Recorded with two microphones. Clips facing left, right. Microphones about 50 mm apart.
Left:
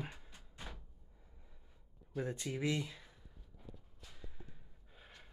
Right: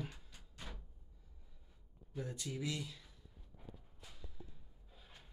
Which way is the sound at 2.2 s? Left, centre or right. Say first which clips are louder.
Left 4 dB; left.